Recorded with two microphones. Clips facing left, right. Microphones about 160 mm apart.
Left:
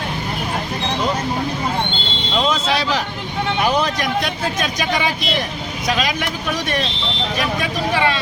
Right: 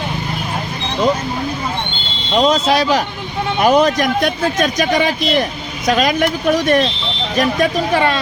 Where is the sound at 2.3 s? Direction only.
40° right (ahead or behind).